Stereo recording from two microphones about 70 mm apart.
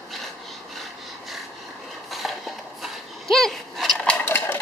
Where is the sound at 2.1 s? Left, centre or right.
Centre.